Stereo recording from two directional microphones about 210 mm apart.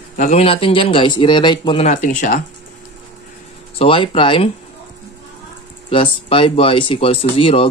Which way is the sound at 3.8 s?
25° left (ahead or behind).